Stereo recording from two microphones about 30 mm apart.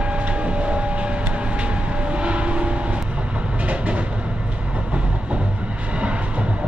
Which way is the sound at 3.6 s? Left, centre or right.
Right.